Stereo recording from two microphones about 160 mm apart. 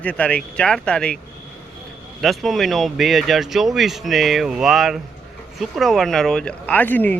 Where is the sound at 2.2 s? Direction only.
Centre (ahead or behind).